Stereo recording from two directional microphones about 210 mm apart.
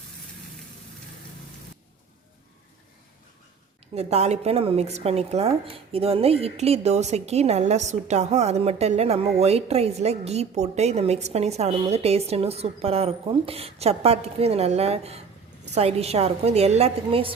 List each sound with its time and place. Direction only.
3.9 s a woman's voice: 30° right (ahead or behind)